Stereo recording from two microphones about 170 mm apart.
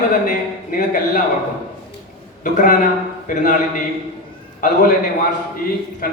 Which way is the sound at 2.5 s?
50° left (ahead or behind).